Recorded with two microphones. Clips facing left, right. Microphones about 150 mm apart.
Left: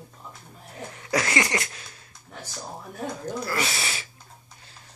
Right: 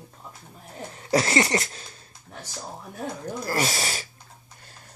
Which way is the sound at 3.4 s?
40° right (ahead or behind).